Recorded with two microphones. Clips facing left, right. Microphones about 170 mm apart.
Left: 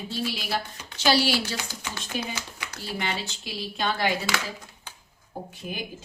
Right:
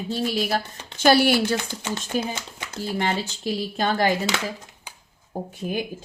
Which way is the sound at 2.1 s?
45° right (ahead or behind).